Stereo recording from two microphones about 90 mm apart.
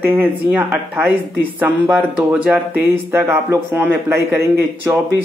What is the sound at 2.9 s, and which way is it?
Speech, 25° right (ahead or behind).